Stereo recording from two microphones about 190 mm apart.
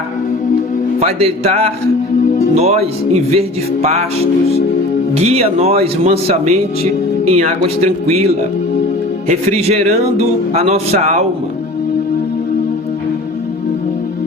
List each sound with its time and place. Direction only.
0.9 s speech: 35° right (ahead or behind)
5.1 s speech: 35° right (ahead or behind)